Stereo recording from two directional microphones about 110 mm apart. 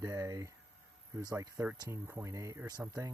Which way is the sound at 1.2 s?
35° right (ahead or behind).